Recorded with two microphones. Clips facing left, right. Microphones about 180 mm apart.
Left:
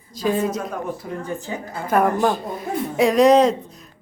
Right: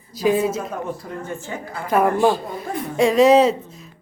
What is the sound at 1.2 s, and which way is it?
Speech, 15° left (ahead or behind).